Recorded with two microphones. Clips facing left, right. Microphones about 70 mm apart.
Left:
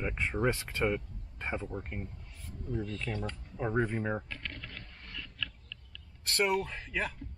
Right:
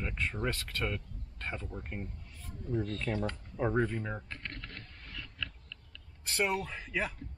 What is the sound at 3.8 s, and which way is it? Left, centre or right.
Speech, centre.